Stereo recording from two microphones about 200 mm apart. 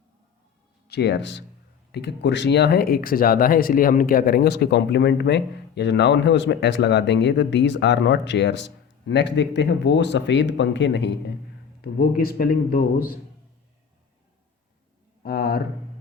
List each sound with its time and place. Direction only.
0.9 s speech: 55° left (ahead or behind)
11.8 s a man's voice: 45° left (ahead or behind)
15.2 s a sound: 50° left (ahead or behind)